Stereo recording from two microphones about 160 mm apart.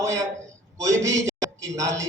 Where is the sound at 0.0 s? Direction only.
20° right (ahead or behind).